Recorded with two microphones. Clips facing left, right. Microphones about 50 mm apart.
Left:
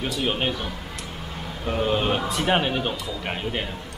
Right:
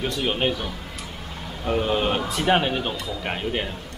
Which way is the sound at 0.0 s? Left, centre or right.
Centre.